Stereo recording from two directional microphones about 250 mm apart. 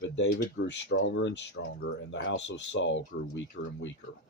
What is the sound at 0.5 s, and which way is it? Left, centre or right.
Speech, left.